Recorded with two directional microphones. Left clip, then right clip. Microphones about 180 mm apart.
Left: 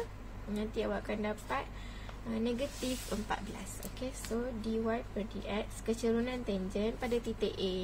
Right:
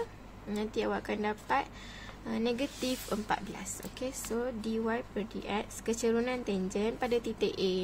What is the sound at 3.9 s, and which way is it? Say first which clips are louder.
A woman's voice: right 3 dB; 50° right (ahead or behind).